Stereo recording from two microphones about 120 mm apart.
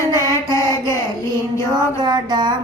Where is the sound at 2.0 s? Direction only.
35° right (ahead or behind).